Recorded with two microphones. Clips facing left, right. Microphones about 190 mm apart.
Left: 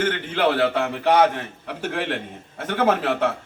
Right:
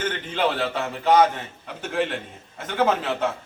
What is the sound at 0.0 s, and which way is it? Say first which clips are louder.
A man's voice: left 3 dB; 65° left (ahead or behind).